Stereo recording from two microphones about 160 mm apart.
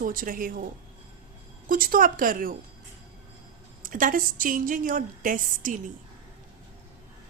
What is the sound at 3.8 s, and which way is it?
A woman's voice, 60° right (ahead or behind).